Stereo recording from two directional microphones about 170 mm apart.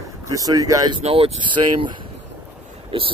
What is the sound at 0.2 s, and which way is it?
Speech, 20° right (ahead or behind).